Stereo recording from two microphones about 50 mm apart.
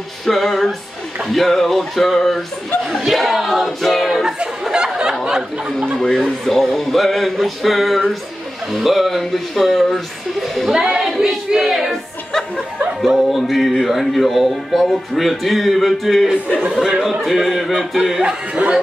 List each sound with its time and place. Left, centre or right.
0.2 s speech: centre
4.6 s a sound: centre
5.2 s speech: centre
6.2 s speech: centre
10.7 s speech: centre
11.9 s music: centre
13.3 s speech: centre
18.2 s speech: right